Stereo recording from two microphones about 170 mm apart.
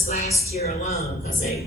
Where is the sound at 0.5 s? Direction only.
40° left (ahead or behind).